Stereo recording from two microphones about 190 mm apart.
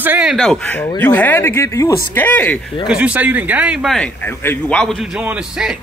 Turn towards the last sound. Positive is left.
turn(degrees=-5)  # may be behind; listen again after turning